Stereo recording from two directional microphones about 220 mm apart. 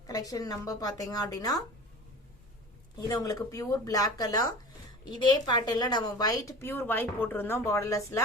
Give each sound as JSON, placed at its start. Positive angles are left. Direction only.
{"t": 0.1, "sound": "a woman's voice", "side_deg": 15}
{"t": 3.1, "sound": "a woman's voice", "side_deg": 15}